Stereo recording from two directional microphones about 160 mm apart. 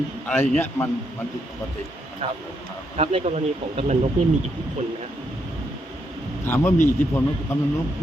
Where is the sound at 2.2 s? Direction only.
40° right (ahead or behind).